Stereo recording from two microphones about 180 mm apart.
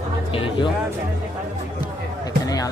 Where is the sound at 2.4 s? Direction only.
20° left (ahead or behind).